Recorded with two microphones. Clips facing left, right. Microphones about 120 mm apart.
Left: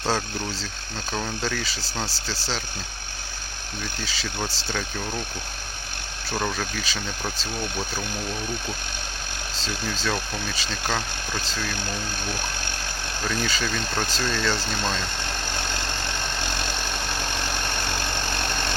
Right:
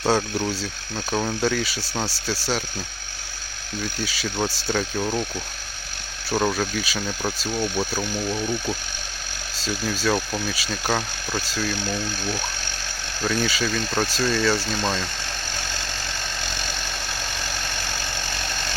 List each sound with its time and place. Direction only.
0.0 s speech: 10° right (ahead or behind)
4.0 s speech: 10° right (ahead or behind)
6.3 s speech: 10° right (ahead or behind)
9.6 s speech: 5° right (ahead or behind)
15.5 s vehicle: 60° left (ahead or behind)